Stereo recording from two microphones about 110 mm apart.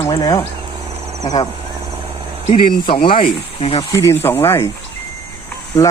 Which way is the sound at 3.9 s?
25° left (ahead or behind).